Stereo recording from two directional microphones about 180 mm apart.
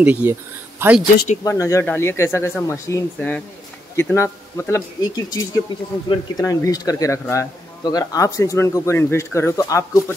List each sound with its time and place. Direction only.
0.0 s speech: 10° right (ahead or behind)
1.4 s speech: 15° left (ahead or behind)
3.2 s speech: 5° left (ahead or behind)
3.9 s speech: 15° left (ahead or behind)